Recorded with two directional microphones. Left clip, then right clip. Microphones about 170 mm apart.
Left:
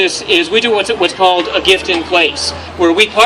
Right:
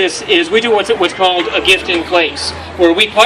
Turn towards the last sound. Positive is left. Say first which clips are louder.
# even
turn(degrees=50)  # may be behind; listen again after turning